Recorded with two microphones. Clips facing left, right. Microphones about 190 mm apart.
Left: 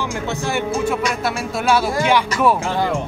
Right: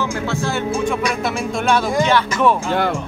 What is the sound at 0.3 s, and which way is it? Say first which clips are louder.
Speech: right 1 dB; 15° left (ahead or behind).